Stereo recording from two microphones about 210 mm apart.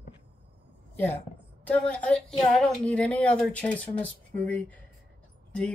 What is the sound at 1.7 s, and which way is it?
A woman's voice, 5° left (ahead or behind).